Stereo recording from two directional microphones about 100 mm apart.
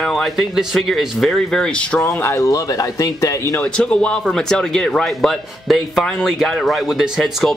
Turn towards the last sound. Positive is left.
turn(degrees=0)  # may be behind; listen again after turning